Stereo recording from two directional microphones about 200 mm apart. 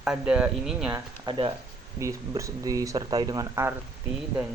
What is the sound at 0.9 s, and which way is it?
Speech, 25° right (ahead or behind).